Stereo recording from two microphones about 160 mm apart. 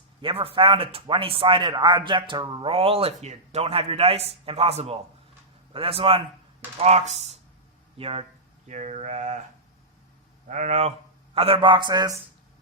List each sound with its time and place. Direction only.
0.2 s speech: 35° right (ahead or behind)
10.5 s speech: 45° right (ahead or behind); by 12.2 s 25° right (ahead or behind)